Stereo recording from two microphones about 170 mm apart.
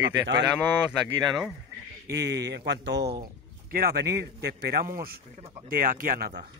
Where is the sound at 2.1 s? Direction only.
80° right.